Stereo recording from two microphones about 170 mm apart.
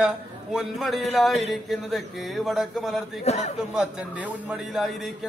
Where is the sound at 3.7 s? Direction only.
5° right (ahead or behind).